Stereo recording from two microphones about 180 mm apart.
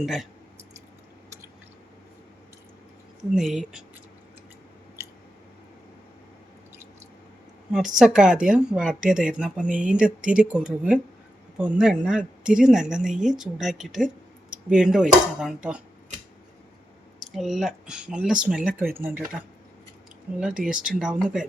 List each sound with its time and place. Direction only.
0.0 s speech: centre (ahead or behind)
3.3 s speech: centre (ahead or behind)
7.9 s speech: 5° right (ahead or behind)
17.3 s speech: centre (ahead or behind)
20.6 s speech: centre (ahead or behind)